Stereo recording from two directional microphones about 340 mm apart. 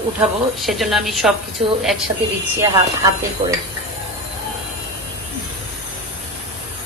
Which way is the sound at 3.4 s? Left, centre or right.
Centre.